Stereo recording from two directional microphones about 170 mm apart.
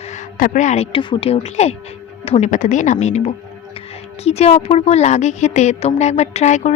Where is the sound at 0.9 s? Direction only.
30° left (ahead or behind).